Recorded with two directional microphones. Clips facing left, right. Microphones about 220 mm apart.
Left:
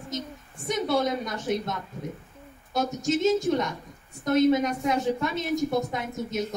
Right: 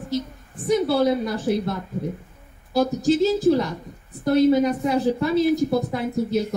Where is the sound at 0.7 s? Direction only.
35° right (ahead or behind).